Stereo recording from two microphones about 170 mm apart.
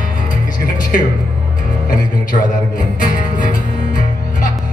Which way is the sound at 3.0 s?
55° left (ahead or behind).